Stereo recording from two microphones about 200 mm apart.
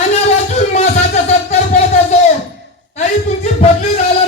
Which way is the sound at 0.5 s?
35° left (ahead or behind).